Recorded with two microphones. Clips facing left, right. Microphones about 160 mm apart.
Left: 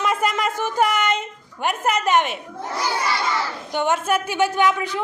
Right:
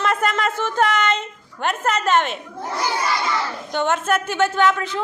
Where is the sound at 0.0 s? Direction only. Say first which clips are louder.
Right 1 dB; 10° left (ahead or behind).